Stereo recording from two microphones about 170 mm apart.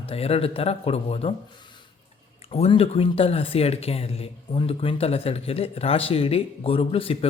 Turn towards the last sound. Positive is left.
turn(degrees=35)  # may be behind; listen again after turning